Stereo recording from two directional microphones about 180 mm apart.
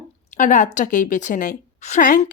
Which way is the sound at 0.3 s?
45° left (ahead or behind).